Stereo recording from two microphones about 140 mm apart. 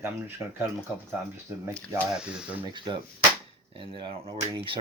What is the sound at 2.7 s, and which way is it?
Speech, 35° right (ahead or behind).